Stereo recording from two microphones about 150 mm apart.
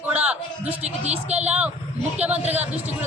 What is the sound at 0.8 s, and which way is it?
Speech, 45° right (ahead or behind).